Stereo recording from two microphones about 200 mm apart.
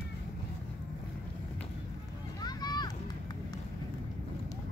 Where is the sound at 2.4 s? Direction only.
20° left (ahead or behind).